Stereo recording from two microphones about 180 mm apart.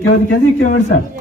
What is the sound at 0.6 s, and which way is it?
Speech, 45° left (ahead or behind).